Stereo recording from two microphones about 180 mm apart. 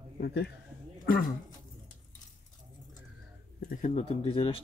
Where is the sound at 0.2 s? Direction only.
65° left (ahead or behind).